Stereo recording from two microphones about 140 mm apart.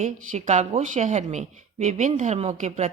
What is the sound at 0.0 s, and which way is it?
A woman's voice, 60° right (ahead or behind).